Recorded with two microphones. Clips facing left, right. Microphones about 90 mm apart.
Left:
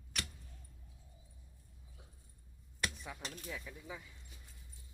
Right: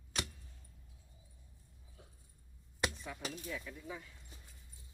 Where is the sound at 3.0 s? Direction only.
5° left (ahead or behind).